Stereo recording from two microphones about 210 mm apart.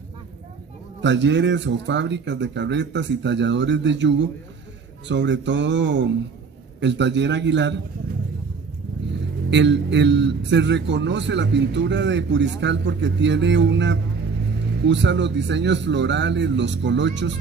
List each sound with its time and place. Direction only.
1.0 s a man's voice: 60° right (ahead or behind)
9.5 s a man's voice: 55° right (ahead or behind)